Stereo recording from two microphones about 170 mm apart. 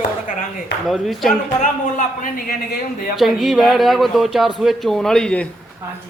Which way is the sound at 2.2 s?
60° left (ahead or behind).